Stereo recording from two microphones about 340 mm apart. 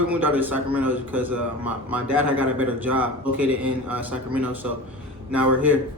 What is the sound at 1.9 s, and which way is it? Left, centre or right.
Speech, left.